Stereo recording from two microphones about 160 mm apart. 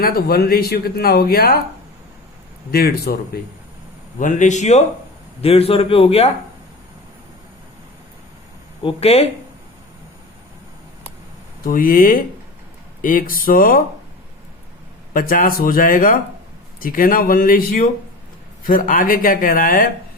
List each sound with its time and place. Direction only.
0.0 s speech: 75° left (ahead or behind)
2.7 s speech: 75° left (ahead or behind)
4.2 s a man's voice: 50° left (ahead or behind)
8.8 s a man's voice: 35° left (ahead or behind)
11.6 s speech: 60° left (ahead or behind)
15.1 s speech: 60° left (ahead or behind)